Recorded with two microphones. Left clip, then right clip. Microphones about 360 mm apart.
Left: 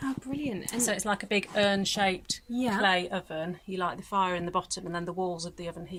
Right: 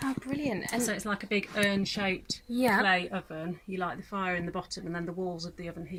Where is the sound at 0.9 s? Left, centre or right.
Left.